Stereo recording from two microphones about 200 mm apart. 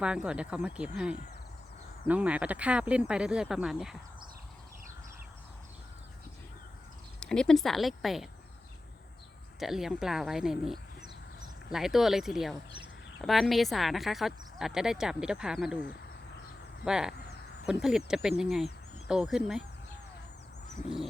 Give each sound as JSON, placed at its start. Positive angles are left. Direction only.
{"t": 0.0, "sound": "speech", "side_deg": -5}
{"t": 7.2, "sound": "speech", "side_deg": 5}
{"t": 9.6, "sound": "speech", "side_deg": 0}
{"t": 16.8, "sound": "speech", "side_deg": -5}
{"t": 17.2, "sound": "a sound", "side_deg": 55}
{"t": 17.7, "sound": "speech", "side_deg": 0}